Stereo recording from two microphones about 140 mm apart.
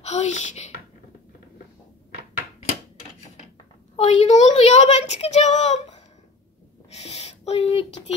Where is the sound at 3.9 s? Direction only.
50° left (ahead or behind).